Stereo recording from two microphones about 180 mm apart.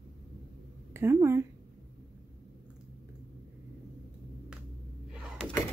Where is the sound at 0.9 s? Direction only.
15° right (ahead or behind).